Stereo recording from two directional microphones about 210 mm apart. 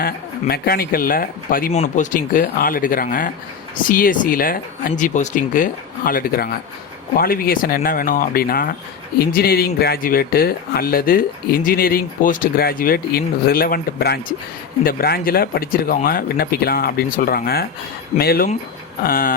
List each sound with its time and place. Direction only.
0.0 s speech: 45° left (ahead or behind)